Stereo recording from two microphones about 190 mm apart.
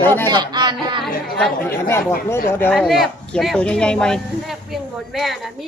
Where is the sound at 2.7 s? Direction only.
Centre (ahead or behind).